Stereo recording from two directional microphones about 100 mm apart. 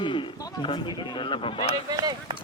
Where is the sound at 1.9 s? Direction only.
40° right (ahead or behind).